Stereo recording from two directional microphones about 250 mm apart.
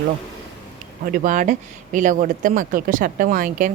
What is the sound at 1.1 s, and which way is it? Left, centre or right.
Speech, right.